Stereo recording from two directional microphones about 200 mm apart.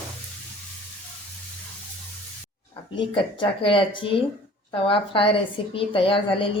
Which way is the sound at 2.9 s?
25° left (ahead or behind).